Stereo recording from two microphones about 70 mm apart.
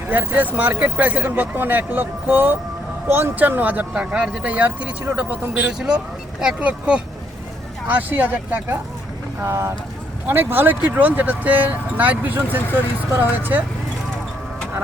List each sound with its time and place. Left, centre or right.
0.1 s speech: right
3.3 s speech: right
9.4 s speech: right
10.2 s speech: right